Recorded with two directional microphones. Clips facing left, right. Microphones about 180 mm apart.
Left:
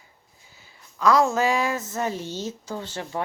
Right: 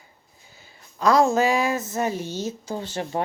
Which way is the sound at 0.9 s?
35° right (ahead or behind).